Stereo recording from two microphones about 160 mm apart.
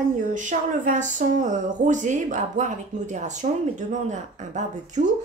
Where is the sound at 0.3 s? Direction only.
55° right (ahead or behind).